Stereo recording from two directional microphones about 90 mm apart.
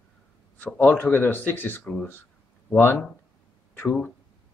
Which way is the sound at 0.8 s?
20° left (ahead or behind).